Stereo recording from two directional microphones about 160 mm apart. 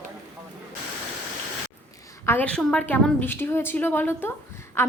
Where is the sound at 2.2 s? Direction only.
10° left (ahead or behind).